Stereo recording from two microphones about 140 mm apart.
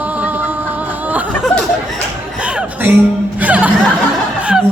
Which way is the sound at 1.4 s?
Centre (ahead or behind).